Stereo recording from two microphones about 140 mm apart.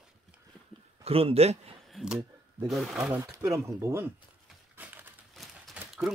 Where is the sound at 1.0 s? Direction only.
45° right (ahead or behind).